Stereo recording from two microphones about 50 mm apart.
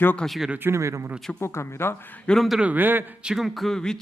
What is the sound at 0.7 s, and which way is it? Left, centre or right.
Speech, right.